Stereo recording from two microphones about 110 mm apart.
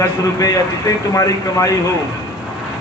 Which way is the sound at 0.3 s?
30° left (ahead or behind).